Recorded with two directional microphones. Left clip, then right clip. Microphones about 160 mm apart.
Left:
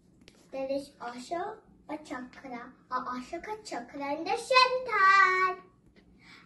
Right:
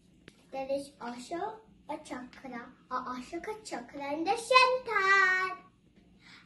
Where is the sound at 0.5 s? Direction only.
20° right (ahead or behind).